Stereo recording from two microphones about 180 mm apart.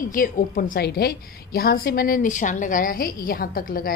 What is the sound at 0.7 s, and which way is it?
A woman's voice, 60° left (ahead or behind).